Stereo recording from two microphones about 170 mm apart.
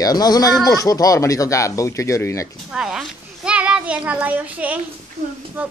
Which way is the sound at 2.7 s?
5° right (ahead or behind).